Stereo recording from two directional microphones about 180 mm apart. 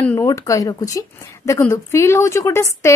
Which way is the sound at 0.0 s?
15° left (ahead or behind).